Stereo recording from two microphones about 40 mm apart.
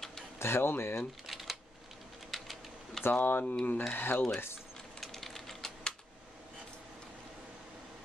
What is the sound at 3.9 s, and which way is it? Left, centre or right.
Speech, left.